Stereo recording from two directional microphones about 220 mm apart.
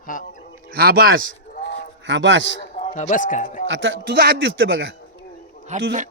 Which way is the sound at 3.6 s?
55° right (ahead or behind).